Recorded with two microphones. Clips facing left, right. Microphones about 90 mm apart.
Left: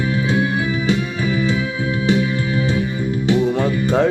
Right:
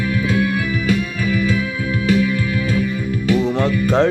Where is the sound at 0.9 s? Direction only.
25° left (ahead or behind).